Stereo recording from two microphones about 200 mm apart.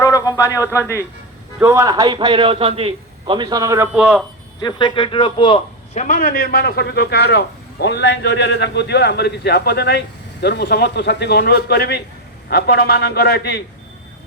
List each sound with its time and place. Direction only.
0.0 s a man's voice: 15° left (ahead or behind)
1.5 s a man's voice: 15° right (ahead or behind)
4.6 s a man's voice: 25° left (ahead or behind)
6.0 s a man's voice: 40° left (ahead or behind)